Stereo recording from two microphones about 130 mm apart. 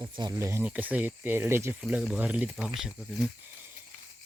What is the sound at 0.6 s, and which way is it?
Speech, 10° right (ahead or behind).